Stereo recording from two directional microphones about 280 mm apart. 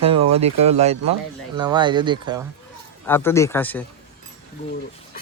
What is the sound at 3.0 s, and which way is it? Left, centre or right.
Speech, centre.